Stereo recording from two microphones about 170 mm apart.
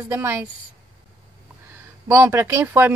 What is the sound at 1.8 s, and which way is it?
Speech, 15° right (ahead or behind).